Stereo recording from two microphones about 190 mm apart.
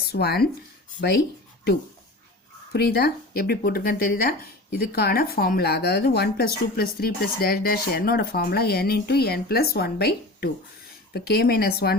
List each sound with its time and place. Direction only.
0.1 s speech: 55° left (ahead or behind)
2.7 s speech: 55° left (ahead or behind)